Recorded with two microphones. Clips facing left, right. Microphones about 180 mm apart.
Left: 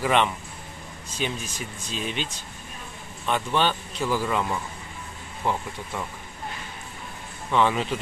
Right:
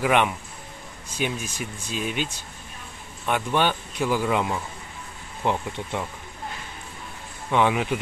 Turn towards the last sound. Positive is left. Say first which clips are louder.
# right 1 dB
turn(degrees=-15)  # may be behind; listen again after turning